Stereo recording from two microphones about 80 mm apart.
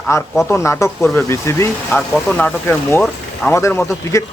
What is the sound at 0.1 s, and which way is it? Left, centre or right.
Speech, left.